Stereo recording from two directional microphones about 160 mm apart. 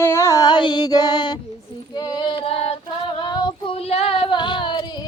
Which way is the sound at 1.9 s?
25° left (ahead or behind).